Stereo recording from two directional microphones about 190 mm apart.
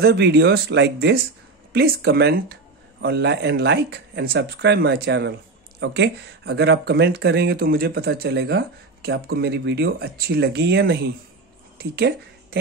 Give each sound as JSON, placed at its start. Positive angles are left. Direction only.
{"t": 0.0, "sound": "speech", "side_deg": -60}